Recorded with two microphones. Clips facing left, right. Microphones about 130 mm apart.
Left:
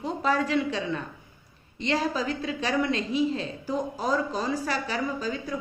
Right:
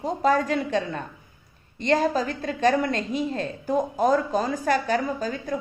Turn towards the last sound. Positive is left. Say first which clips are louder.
# right 3 dB
turn(degrees=-50)  # may be behind; listen again after turning